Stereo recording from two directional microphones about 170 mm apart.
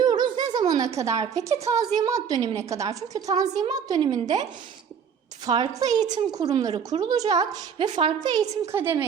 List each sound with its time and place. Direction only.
0.0 s a sound: 25° right (ahead or behind)
1.3 s a woman's voice: 20° right (ahead or behind)
5.5 s a woman's voice: 25° right (ahead or behind)